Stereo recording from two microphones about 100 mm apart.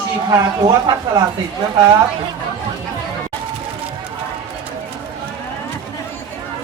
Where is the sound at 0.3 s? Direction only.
40° right (ahead or behind).